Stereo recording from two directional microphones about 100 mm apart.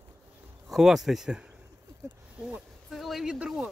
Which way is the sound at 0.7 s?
5° right (ahead or behind).